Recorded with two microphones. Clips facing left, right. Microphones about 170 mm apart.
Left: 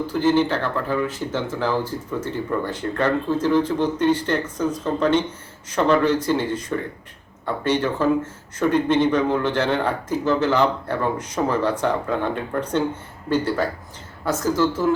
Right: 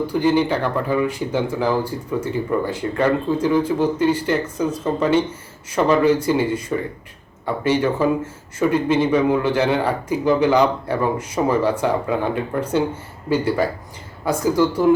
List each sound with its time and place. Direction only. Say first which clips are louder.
0.1 s speech: even; 10° right (ahead or behind)